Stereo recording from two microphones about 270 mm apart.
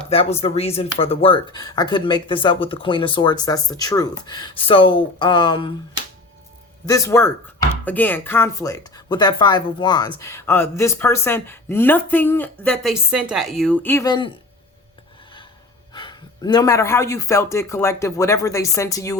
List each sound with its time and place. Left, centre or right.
0.1 s speech: left
6.8 s speech: centre
15.9 s speech: centre